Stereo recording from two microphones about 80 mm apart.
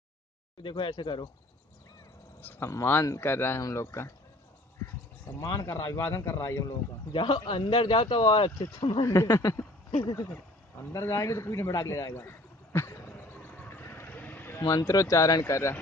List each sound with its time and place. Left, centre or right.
0.6 s speech: left
2.6 s speech: left
5.4 s speech: left
7.1 s speech: left
9.0 s speech: left
10.8 s a sound: left
14.6 s speech: left